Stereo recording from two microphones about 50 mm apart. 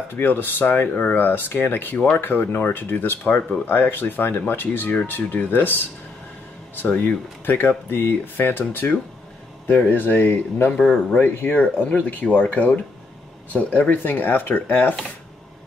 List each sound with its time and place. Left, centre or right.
0.1 s speech: left
0.9 s speech: left
6.8 s speech: left
10.8 s speech: centre
11.1 s speech: left